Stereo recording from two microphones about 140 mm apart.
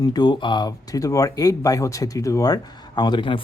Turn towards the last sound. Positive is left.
turn(degrees=35)  # may be behind; listen again after turning